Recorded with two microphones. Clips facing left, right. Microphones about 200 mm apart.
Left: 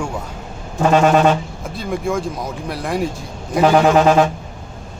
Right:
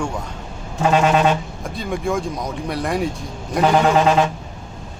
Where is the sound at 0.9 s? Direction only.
45° left (ahead or behind).